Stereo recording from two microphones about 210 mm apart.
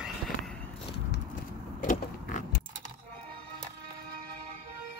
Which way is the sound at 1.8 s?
40° left (ahead or behind).